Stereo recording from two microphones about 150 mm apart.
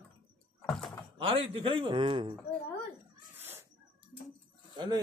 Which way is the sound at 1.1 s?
40° right (ahead or behind).